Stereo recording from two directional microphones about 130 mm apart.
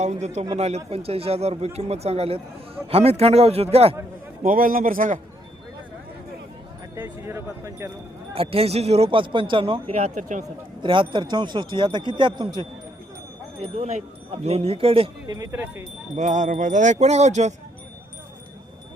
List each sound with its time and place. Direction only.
0.0 s a man's voice: 60° right (ahead or behind)
4.4 s a man's voice: 90° right
6.9 s speech: 20° right (ahead or behind)
8.4 s a man's voice: 50° right (ahead or behind)
10.2 s speech: 75° right (ahead or behind)
10.8 s speech: 40° right (ahead or behind)
13.6 s a man's voice: 55° right (ahead or behind)
15.5 s speech: 20° right (ahead or behind)
16.1 s speech: 70° right (ahead or behind)